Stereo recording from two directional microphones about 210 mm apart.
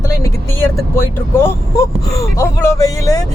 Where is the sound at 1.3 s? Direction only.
10° left (ahead or behind).